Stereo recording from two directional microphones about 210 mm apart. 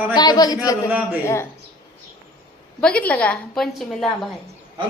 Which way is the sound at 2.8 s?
5° left (ahead or behind).